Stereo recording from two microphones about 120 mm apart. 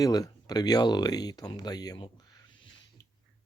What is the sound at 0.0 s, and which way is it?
Speech, 30° left (ahead or behind).